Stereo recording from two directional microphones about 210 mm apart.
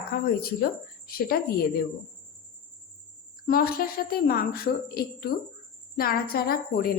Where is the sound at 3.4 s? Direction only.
45° left (ahead or behind).